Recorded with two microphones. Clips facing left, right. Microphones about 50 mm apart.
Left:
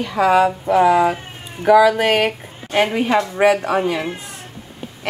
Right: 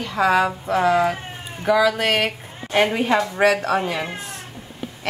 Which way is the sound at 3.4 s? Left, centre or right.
Centre.